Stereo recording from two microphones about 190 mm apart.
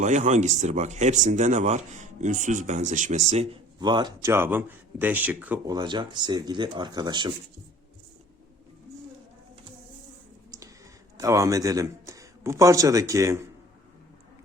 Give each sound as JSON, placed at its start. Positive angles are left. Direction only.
{"t": 0.0, "sound": "speech", "side_deg": -40}
{"t": 5.6, "sound": "speech", "side_deg": -20}
{"t": 11.2, "sound": "a man's voice", "side_deg": -15}